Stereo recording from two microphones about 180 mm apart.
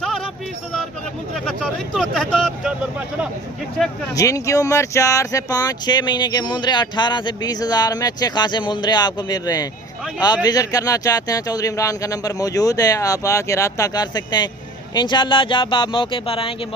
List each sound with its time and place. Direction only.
1.5 s speech: centre (ahead or behind)
4.1 s speech: 20° left (ahead or behind)